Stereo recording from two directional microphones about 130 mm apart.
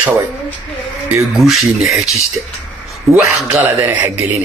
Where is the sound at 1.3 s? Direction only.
Centre (ahead or behind).